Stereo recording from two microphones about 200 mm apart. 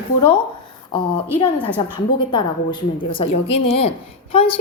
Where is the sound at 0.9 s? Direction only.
25° left (ahead or behind).